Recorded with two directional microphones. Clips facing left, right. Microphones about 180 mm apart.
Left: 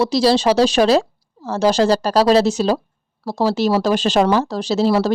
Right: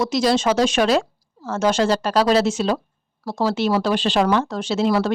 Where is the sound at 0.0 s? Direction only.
30° left (ahead or behind).